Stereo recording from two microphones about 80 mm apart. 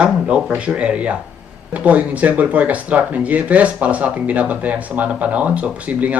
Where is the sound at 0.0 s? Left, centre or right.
Centre.